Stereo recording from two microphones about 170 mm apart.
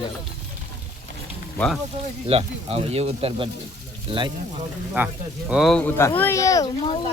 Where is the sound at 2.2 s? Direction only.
35° right (ahead or behind).